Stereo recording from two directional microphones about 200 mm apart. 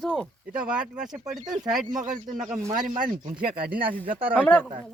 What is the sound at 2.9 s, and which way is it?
Speech, 40° right (ahead or behind).